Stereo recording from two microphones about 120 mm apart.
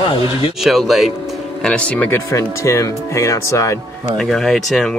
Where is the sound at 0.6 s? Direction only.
Centre (ahead or behind).